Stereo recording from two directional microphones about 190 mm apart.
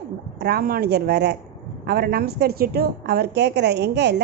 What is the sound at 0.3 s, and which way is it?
A woman's voice, 55° right (ahead or behind).